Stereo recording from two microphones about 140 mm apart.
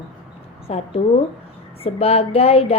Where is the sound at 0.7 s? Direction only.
45° left (ahead or behind).